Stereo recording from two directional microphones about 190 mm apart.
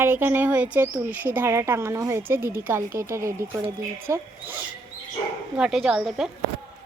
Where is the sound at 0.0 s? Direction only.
10° right (ahead or behind).